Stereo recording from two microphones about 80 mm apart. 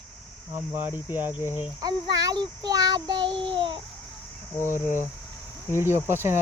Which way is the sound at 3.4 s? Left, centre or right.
Right.